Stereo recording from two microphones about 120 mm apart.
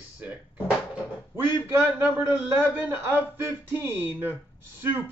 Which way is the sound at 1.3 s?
20° right (ahead or behind).